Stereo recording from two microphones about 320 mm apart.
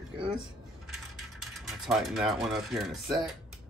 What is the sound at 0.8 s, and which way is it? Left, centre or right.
Mechanisms, centre.